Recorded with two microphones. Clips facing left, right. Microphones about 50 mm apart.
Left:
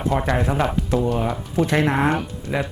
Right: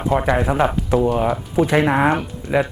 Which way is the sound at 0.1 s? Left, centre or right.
Centre.